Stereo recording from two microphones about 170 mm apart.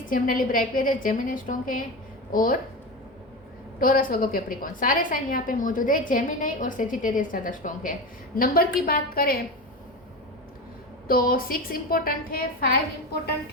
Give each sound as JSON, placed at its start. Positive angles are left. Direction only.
{"t": 0.1, "sound": "a woman's voice", "side_deg": 55}
{"t": 3.8, "sound": "a woman's voice", "side_deg": 55}
{"t": 11.1, "sound": "a woman's voice", "side_deg": 55}